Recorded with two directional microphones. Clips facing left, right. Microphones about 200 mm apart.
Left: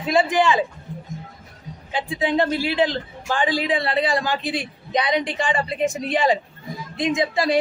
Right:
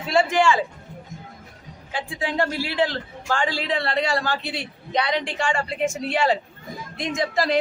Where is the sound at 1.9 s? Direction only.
20° left (ahead or behind).